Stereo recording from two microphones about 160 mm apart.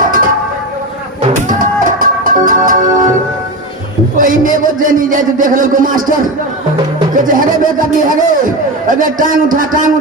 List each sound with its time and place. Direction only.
0.0 s a sound: 60° right (ahead or behind)
1.3 s music: 55° right (ahead or behind)
4.2 s a man's voice: 55° right (ahead or behind)